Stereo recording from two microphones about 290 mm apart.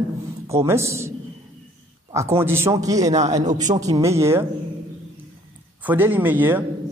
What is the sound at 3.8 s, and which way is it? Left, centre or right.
Speech, centre.